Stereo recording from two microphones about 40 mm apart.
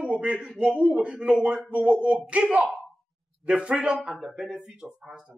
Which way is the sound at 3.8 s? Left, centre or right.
Centre.